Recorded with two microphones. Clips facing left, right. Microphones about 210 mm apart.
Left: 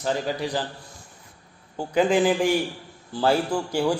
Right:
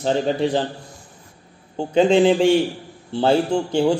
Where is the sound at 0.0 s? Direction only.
25° right (ahead or behind).